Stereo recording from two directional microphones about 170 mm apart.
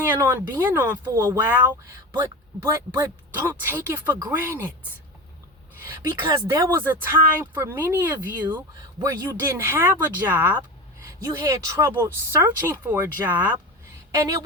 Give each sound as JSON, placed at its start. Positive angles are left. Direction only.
{"t": 0.0, "sound": "a woman's voice", "side_deg": -15}
{"t": 5.8, "sound": "a woman's voice", "side_deg": -20}